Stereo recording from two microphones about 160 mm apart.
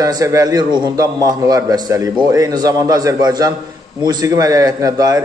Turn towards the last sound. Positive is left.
turn(degrees=-20)  # may be behind; listen again after turning